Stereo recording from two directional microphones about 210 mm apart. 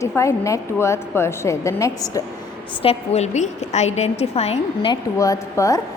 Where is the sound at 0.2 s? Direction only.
15° left (ahead or behind).